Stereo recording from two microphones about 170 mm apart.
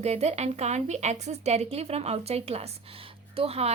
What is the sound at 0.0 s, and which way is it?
Speech, 40° right (ahead or behind).